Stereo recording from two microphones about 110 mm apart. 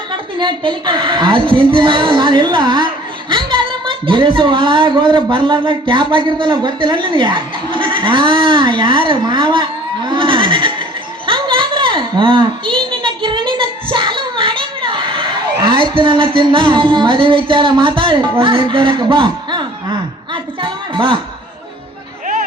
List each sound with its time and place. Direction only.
0.1 s a woman's voice: 45° right (ahead or behind)
11.3 s a sound: 50° right (ahead or behind)
15.6 s music: 45° right (ahead or behind)